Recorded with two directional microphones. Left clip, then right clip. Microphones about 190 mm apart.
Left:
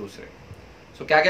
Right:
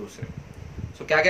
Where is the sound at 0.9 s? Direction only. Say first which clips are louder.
Left 3 dB; 10° left (ahead or behind).